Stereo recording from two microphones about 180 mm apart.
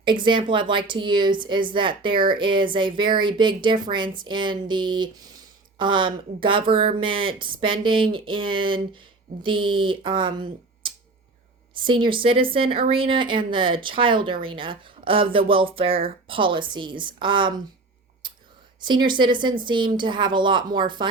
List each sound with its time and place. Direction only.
0.0 s a woman's voice: 25° right (ahead or behind)
18.2 s a sound: 25° right (ahead or behind)
18.8 s a woman's voice: 25° right (ahead or behind)